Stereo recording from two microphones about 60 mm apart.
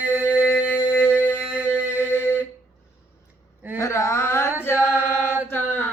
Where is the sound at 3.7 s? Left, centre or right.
Left.